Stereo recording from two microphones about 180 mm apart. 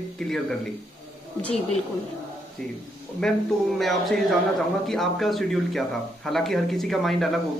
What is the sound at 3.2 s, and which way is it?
Speech, 5° left (ahead or behind).